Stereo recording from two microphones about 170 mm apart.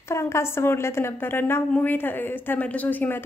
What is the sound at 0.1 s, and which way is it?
A woman's voice, 15° left (ahead or behind).